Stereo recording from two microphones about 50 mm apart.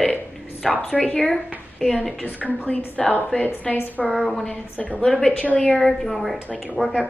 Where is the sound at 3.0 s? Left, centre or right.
Left.